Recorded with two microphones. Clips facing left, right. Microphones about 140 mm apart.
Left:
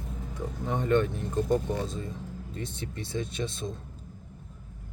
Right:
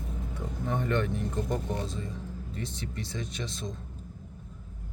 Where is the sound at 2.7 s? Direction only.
25° left (ahead or behind).